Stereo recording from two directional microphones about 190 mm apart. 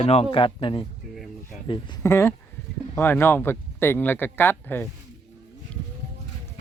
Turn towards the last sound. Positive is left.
turn(degrees=10)  # may be behind; listen again after turning